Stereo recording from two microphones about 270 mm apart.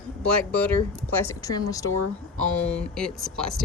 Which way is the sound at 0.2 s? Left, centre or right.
Centre.